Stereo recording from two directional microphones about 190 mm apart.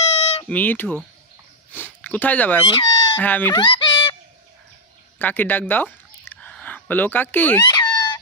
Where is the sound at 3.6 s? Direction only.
25° left (ahead or behind).